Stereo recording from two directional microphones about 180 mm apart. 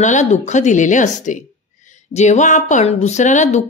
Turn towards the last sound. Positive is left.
turn(degrees=40)  # may be behind; listen again after turning